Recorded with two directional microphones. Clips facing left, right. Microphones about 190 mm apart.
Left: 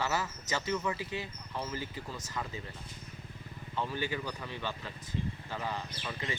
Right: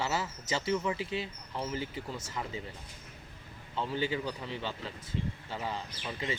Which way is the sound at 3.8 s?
20° right (ahead or behind).